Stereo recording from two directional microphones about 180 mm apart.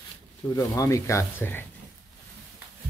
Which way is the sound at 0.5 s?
20° left (ahead or behind).